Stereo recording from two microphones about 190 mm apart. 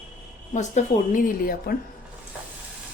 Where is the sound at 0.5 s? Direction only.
40° left (ahead or behind).